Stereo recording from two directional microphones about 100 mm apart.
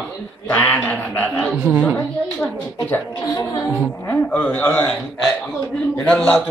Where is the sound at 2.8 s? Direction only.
15° left (ahead or behind).